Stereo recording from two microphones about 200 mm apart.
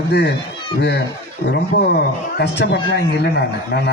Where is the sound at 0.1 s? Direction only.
55° left (ahead or behind).